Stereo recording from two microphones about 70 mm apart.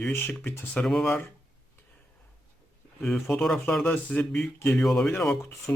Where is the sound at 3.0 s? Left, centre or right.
Centre.